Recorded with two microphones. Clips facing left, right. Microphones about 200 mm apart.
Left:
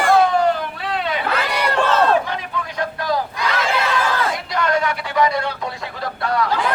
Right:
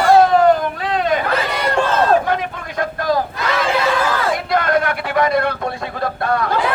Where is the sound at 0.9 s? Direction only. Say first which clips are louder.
Right 4 dB; 45° right (ahead or behind).